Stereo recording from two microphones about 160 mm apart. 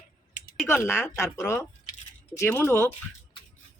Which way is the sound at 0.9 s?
15° left (ahead or behind).